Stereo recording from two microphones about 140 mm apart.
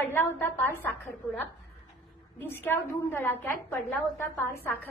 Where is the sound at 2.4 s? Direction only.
15° left (ahead or behind).